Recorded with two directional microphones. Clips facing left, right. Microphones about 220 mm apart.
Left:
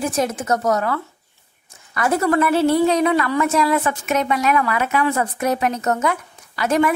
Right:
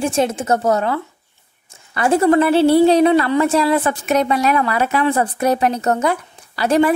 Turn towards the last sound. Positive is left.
turn(degrees=-30)  # may be behind; listen again after turning